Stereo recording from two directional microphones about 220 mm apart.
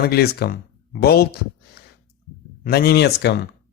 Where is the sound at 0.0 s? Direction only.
45° left (ahead or behind).